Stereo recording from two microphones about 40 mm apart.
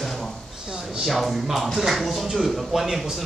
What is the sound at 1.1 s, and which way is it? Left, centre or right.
A man's voice, centre.